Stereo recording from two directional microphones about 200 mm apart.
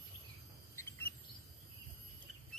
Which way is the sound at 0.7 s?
10° left (ahead or behind).